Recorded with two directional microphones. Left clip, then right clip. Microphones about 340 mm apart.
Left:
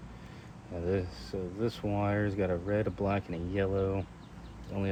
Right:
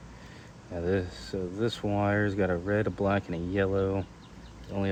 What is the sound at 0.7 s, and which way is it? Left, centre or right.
Speech, right.